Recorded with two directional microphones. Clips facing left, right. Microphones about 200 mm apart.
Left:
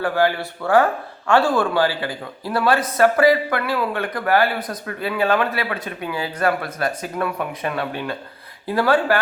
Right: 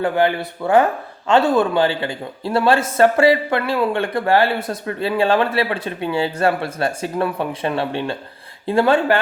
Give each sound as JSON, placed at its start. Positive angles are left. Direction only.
{"t": 0.0, "sound": "a man's voice", "side_deg": -20}